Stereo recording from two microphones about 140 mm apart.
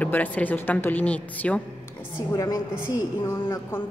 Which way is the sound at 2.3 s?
25° left (ahead or behind).